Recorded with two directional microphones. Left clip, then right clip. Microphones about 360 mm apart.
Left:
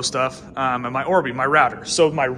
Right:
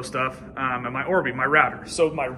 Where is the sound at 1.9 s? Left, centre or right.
Left.